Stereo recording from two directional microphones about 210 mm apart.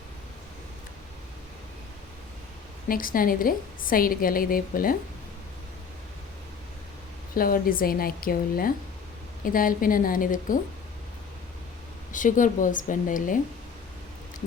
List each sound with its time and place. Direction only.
2.9 s a woman's voice: 40° left (ahead or behind)
7.3 s a woman's voice: 45° left (ahead or behind)
12.1 s speech: 40° left (ahead or behind)